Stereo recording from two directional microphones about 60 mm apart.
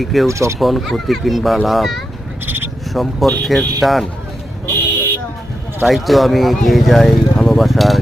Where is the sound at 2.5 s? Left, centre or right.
Right.